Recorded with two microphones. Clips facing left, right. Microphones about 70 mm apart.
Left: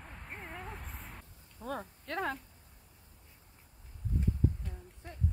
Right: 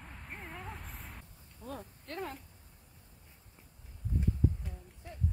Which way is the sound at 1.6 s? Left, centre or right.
Left.